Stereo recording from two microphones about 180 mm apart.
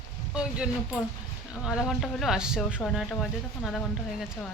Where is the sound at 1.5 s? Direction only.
5° right (ahead or behind).